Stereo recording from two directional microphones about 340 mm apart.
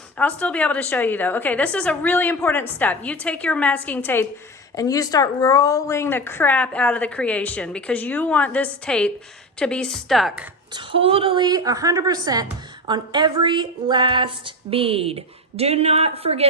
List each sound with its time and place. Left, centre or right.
0.2 s a woman's voice: centre
10.8 s a woman's voice: centre